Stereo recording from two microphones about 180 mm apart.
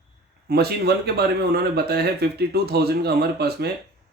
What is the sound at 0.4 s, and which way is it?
Speech, 60° right (ahead or behind).